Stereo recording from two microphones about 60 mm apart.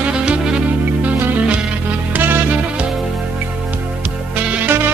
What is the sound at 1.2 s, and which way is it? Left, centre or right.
Music, right.